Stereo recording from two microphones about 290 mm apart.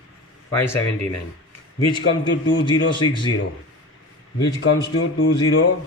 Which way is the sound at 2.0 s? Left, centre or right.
Left.